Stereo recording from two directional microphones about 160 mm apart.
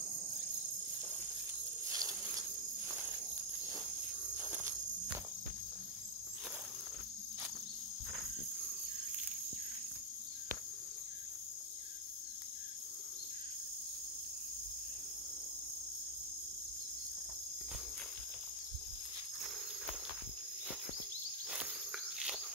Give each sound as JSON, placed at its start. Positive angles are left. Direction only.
{"t": 1.9, "sound": "cricket", "side_deg": -20}
{"t": 4.4, "sound": "insect", "side_deg": -10}
{"t": 21.5, "sound": "cricket", "side_deg": -5}